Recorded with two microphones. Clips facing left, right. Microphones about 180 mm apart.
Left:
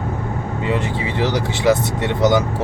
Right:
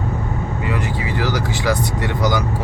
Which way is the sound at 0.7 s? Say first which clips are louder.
Left 3 dB; 25° left (ahead or behind).